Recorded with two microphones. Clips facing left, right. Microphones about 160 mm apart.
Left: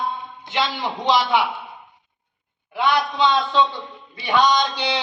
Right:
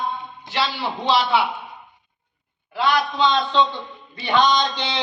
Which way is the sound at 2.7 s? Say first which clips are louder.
Even; 15° left (ahead or behind).